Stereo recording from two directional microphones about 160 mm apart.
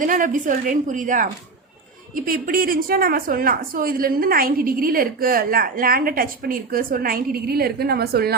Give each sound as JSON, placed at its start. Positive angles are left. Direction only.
{"t": 0.0, "sound": "a woman's voice", "side_deg": -55}